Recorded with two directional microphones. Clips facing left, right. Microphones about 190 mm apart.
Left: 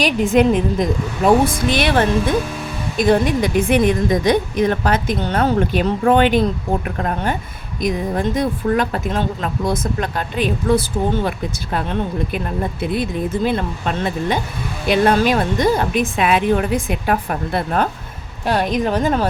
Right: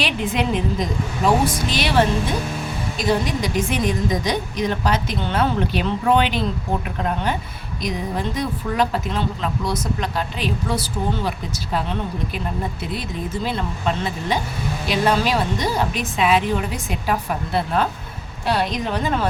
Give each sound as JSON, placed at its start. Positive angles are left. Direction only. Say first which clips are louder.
{"t": 0.0, "sound": "a woman's voice", "louder": "left 8 dB", "side_deg": 45}